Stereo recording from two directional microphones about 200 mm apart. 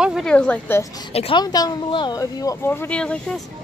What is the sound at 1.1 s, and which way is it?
Speech, 25° left (ahead or behind).